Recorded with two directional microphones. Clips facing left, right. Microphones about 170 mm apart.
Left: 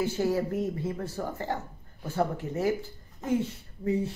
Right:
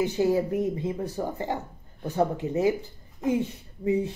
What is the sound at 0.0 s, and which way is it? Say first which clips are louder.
Speech: right 4 dB; 15° right (ahead or behind).